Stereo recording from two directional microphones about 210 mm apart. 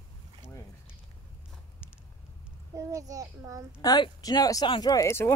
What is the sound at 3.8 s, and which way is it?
Speech, 20° left (ahead or behind).